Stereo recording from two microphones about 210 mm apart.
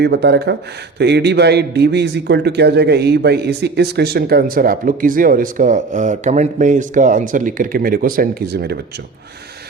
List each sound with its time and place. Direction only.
0.0 s a man's voice: 50° right (ahead or behind)